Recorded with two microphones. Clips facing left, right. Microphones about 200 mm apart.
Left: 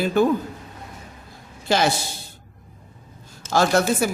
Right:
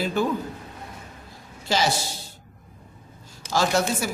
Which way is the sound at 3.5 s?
55° left (ahead or behind).